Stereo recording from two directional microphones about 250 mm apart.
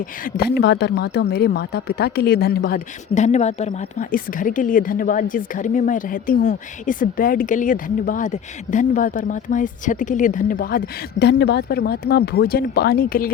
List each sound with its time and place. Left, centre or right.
0.0 s a woman's voice: left